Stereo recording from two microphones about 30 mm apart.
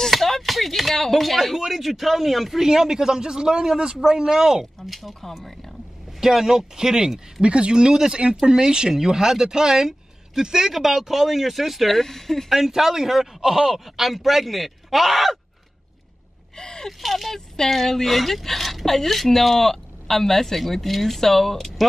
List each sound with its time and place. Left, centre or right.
0.1 s a sound: centre
1.0 s a man's voice: centre
2.6 s a man's voice: centre
4.8 s a man's voice: centre
6.2 s a man's voice: centre
7.4 s a man's voice: right; by 12.0 s centre
12.0 s a woman's voice: centre
12.4 s speech: centre
16.5 s gasp: left
17.0 s a man's voice: centre